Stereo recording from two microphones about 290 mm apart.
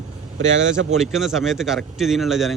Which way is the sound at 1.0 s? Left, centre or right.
Centre.